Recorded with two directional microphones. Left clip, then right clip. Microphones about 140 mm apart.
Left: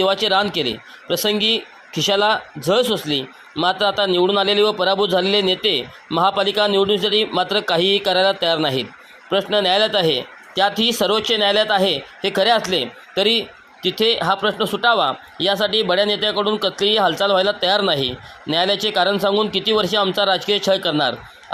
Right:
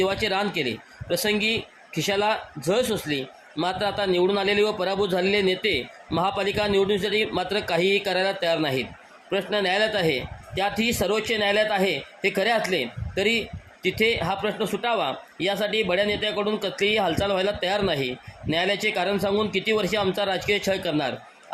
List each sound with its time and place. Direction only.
0.0 s speech: 15° left (ahead or behind)
13.8 s speech: 15° left (ahead or behind)